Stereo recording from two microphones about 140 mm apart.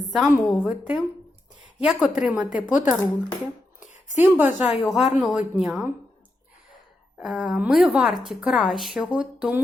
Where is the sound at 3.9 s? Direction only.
60° left (ahead or behind).